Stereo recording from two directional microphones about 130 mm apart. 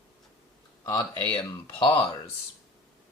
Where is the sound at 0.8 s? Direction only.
25° left (ahead or behind).